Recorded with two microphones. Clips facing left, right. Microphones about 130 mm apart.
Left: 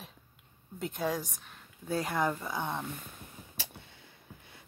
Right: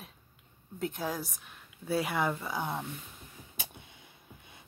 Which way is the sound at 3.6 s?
15° right (ahead or behind).